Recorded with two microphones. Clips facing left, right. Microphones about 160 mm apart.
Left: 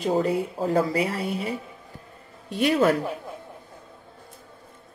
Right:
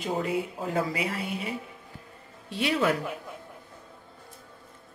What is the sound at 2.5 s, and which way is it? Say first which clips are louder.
Speech: left 5 dB; 45° left (ahead or behind).